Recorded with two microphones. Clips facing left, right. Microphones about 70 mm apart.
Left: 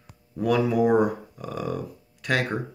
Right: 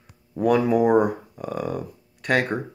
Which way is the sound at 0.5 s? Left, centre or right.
Right.